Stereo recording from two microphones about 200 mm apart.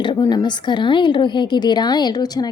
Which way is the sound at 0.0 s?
20° left (ahead or behind).